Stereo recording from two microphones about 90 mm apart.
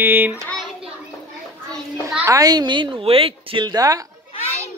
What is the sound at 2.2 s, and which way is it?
A woman's voice, 40° right (ahead or behind).